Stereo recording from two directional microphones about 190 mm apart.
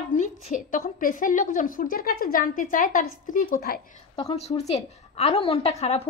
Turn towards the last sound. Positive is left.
turn(degrees=35)  # may be behind; listen again after turning